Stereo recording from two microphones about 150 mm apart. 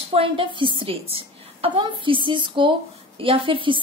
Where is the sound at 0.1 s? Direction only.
35° right (ahead or behind).